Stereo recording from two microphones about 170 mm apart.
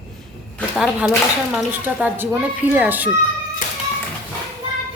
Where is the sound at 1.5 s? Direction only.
10° right (ahead or behind).